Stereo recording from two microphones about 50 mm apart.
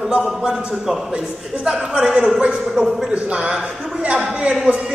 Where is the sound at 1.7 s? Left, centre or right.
Centre.